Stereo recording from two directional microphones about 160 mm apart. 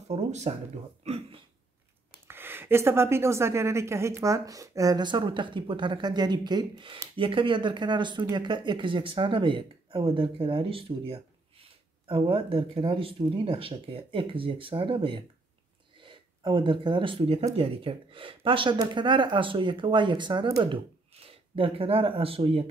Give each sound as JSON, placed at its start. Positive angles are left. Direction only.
{"t": 0.1, "sound": "speech", "side_deg": -45}
{"t": 1.0, "sound": "a sound", "side_deg": -40}
{"t": 2.2, "sound": "a woman's voice", "side_deg": -15}